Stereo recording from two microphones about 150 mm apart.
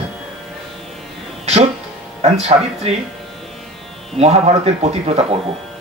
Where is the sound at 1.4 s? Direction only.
45° right (ahead or behind).